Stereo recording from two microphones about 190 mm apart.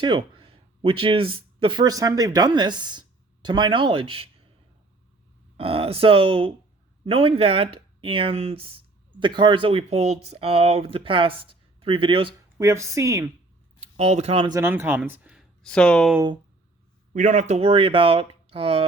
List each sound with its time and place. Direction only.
0.0 s speech: 25° right (ahead or behind)
5.5 s speech: 30° right (ahead or behind)
12.5 s speech: 15° right (ahead or behind)
13.9 s speech: 35° right (ahead or behind)
14.5 s speech: 15° right (ahead or behind); by 16.1 s 5° left (ahead or behind)
17.2 s speech: 40° right (ahead or behind)